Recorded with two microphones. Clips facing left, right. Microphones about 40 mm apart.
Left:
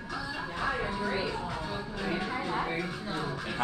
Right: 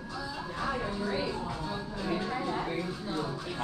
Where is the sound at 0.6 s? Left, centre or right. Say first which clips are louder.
Left 1 dB; left.